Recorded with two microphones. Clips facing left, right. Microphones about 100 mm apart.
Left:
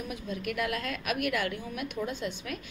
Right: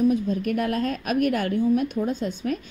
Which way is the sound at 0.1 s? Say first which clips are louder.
Right 11 dB; 40° right (ahead or behind).